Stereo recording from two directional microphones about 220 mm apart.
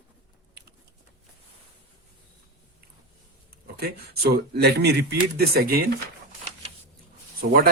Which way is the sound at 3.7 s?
45° right (ahead or behind).